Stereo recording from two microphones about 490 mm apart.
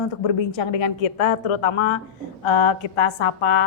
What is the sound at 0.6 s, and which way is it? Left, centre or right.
A woman's voice, left.